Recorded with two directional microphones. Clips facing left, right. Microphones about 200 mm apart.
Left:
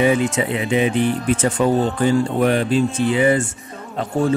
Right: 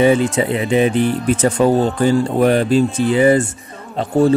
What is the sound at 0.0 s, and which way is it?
Speech, 35° right (ahead or behind).